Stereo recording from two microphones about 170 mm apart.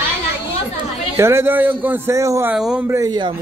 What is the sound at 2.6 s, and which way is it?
Speech, 5° right (ahead or behind).